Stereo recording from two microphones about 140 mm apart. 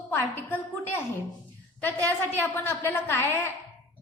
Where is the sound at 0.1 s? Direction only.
15° left (ahead or behind).